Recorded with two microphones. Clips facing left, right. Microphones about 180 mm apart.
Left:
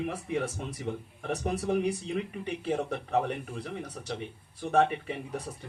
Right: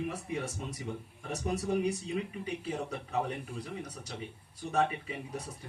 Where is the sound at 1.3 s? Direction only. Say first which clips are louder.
Left 3 dB; 60° left (ahead or behind).